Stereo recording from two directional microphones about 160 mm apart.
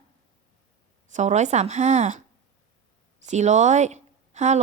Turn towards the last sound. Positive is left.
turn(degrees=-45)  # may be behind; listen again after turning